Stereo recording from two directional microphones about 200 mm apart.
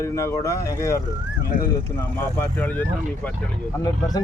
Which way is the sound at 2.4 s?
10° left (ahead or behind).